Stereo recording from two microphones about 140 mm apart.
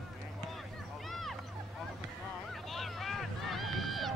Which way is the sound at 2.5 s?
Centre (ahead or behind).